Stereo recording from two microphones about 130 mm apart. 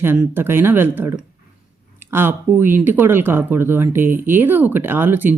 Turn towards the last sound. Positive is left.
turn(degrees=-15)  # may be behind; listen again after turning